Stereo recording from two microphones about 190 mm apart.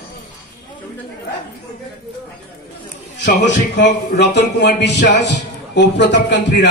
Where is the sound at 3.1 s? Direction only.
65° left (ahead or behind).